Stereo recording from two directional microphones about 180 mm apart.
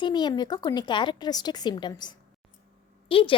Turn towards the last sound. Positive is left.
turn(degrees=30)  # may be behind; listen again after turning